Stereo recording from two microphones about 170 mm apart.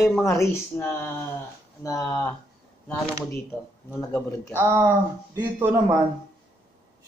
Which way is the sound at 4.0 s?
15° left (ahead or behind).